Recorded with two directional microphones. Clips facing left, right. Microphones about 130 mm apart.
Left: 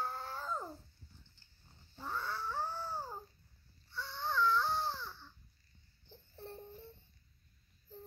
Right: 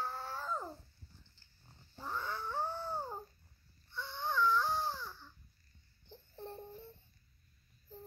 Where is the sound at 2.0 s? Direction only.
10° right (ahead or behind).